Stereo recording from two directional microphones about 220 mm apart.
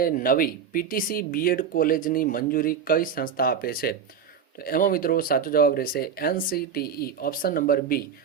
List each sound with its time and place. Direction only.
0.0 s speech: 40° left (ahead or behind)